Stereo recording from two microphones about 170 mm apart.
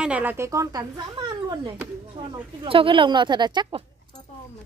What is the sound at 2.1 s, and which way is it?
A woman's voice, 30° right (ahead or behind).